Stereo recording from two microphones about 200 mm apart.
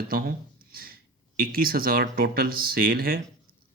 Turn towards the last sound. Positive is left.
turn(degrees=-50)  # may be behind; listen again after turning